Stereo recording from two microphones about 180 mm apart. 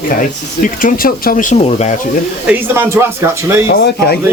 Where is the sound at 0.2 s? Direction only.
45° left (ahead or behind).